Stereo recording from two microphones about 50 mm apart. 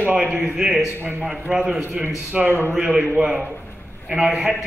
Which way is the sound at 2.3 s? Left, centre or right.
Centre.